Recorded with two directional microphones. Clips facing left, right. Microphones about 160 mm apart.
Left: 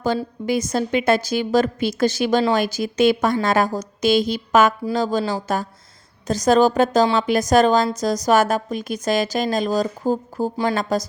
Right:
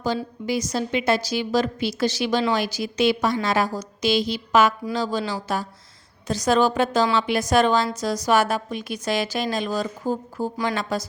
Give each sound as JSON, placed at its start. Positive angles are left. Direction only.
{"t": 0.4, "sound": "a woman's voice", "side_deg": 55}